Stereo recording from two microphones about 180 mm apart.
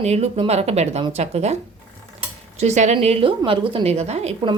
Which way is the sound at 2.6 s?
40° right (ahead or behind).